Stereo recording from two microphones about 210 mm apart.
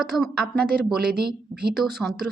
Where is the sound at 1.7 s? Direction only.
Centre (ahead or behind).